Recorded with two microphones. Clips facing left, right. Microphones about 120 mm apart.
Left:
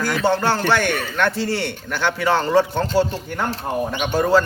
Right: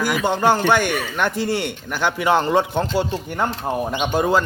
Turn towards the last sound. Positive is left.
turn(degrees=-20)  # may be behind; listen again after turning